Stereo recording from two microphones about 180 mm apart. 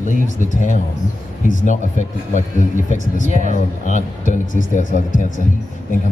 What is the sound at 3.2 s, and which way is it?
Speech, 45° right (ahead or behind).